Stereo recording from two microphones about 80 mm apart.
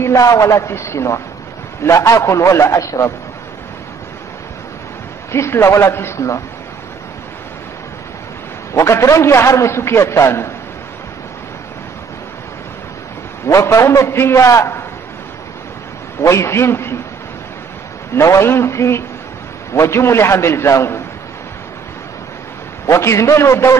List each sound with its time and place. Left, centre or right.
0.0 s a man's voice: left
5.3 s a man's voice: left
8.7 s a man's voice: left
13.5 s a man's voice: left
16.2 s a man's voice: left
18.1 s a man's voice: left
22.8 s a man's voice: left